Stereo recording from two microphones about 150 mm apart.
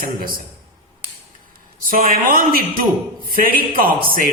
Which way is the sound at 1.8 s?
65° right (ahead or behind).